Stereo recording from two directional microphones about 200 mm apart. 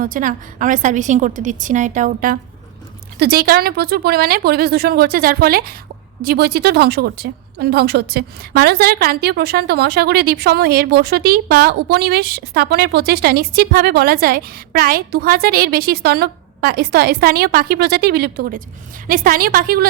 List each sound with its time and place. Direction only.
0.0 s a woman's voice: 40° right (ahead or behind)